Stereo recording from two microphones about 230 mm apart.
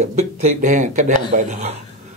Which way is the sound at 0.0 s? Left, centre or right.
Right.